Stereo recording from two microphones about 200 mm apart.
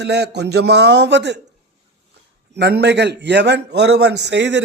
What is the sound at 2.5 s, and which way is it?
A man's voice, 55° right (ahead or behind).